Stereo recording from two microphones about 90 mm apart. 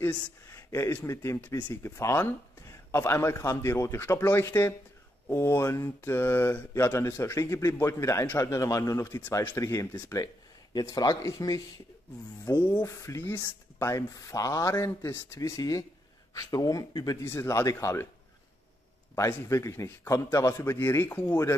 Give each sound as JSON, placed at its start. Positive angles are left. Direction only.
{"t": 0.0, "sound": "a man's voice", "side_deg": 30}
{"t": 12.4, "sound": "speech", "side_deg": 20}
{"t": 12.8, "sound": "a man's voice", "side_deg": 35}
{"t": 14.8, "sound": "a man's voice", "side_deg": 30}
{"t": 17.2, "sound": "a man's voice", "side_deg": 30}
{"t": 19.1, "sound": "a man's voice", "side_deg": 35}